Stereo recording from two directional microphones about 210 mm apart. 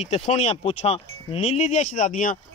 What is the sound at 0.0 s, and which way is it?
Speech, 30° left (ahead or behind).